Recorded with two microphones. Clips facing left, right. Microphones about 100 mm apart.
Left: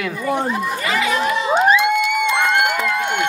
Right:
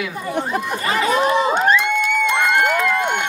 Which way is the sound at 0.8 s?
35° right (ahead or behind).